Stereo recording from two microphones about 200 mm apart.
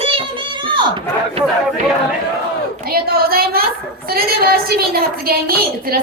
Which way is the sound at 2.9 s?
50° right (ahead or behind).